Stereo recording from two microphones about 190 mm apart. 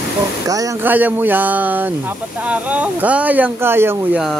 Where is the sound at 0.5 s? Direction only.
15° right (ahead or behind).